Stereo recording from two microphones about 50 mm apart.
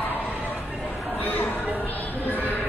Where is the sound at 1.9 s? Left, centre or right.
Left.